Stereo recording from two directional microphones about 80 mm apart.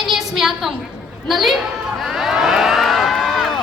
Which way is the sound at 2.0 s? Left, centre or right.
Centre.